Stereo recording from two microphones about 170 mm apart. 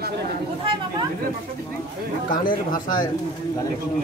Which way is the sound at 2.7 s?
55° left (ahead or behind).